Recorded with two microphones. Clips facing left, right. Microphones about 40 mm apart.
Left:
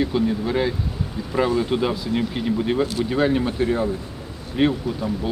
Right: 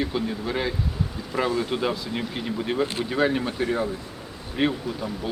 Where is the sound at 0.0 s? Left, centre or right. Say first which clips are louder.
Left 5 dB; centre.